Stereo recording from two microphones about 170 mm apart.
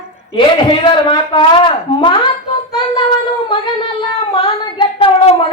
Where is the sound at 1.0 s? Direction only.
30° left (ahead or behind).